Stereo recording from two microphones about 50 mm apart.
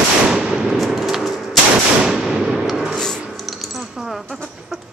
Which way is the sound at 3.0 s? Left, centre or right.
Centre.